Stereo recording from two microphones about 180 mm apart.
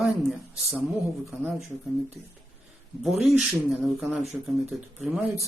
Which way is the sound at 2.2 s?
Centre (ahead or behind).